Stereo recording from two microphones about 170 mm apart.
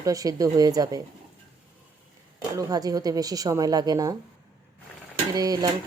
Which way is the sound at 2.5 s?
20° right (ahead or behind).